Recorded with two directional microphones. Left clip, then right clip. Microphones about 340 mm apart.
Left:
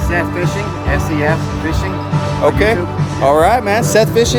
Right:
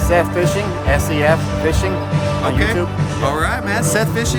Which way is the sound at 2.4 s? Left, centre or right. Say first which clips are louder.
Left 8 dB; centre.